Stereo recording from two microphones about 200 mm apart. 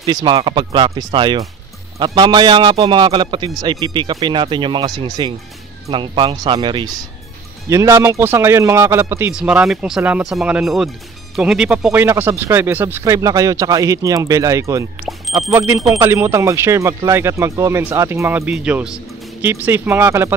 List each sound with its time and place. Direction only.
0.0 s a man's voice: 20° right (ahead or behind)